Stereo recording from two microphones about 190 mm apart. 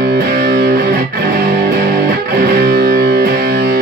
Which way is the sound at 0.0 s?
60° right (ahead or behind).